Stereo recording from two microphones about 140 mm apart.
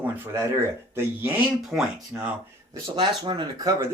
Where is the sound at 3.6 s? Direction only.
25° right (ahead or behind).